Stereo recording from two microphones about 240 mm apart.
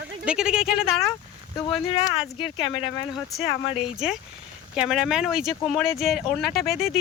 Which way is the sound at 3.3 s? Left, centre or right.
Centre.